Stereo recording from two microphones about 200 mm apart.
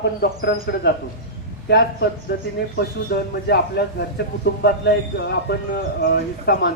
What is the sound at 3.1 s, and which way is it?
Speech, 55° left (ahead or behind).